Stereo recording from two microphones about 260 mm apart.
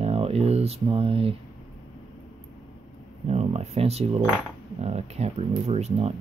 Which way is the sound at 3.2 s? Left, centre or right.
Right.